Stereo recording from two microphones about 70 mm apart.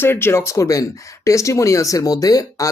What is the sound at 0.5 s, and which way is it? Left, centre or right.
Speech, left.